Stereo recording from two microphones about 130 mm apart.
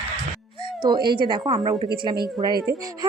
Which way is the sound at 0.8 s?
35° right (ahead or behind).